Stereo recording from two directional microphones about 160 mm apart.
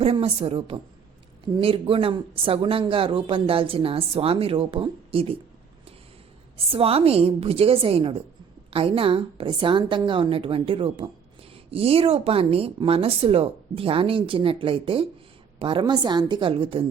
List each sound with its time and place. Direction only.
0.0 s speech: 35° right (ahead or behind)
6.7 s speech: 35° right (ahead or behind)